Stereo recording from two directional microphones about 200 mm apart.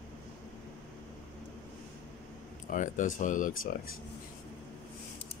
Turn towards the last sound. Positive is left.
turn(degrees=40)  # may be behind; listen again after turning